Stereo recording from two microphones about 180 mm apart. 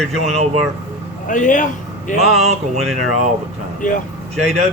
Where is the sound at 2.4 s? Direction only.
35° right (ahead or behind).